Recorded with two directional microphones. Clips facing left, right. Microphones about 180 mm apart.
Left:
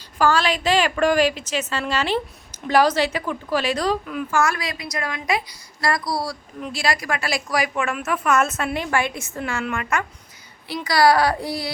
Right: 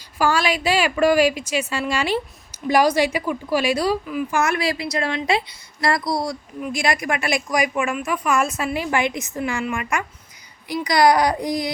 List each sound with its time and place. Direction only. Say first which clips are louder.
0.2 s a woman's voice: left 1 dB; 10° right (ahead or behind)
4.3 s a woman's voice: right 1 dB; 20° right (ahead or behind)
7.9 s a woman's voice: even; centre (ahead or behind)
8.9 s a woman's voice: right 2 dB; 20° right (ahead or behind)
9.4 s a woman's voice: right 1 dB; 10° right (ahead or behind)